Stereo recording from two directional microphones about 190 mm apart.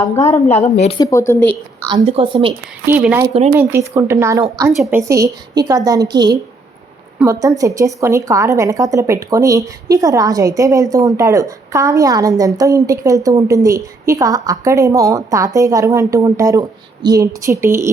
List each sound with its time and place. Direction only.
0.3 s a woman's voice: 35° left (ahead or behind)
0.9 s speech: 20° left (ahead or behind)
1.8 s a woman's voice: 20° right (ahead or behind)
2.8 s a woman's voice: 10° right (ahead or behind)
7.2 s a woman's voice: 10° right (ahead or behind)